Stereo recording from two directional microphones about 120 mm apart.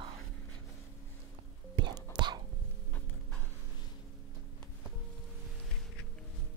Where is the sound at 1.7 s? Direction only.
40° right (ahead or behind).